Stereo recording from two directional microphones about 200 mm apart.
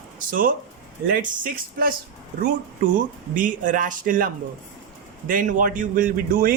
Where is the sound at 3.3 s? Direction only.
40° right (ahead or behind).